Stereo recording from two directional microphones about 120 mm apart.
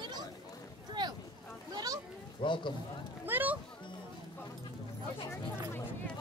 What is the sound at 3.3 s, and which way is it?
Music, 15° right (ahead or behind).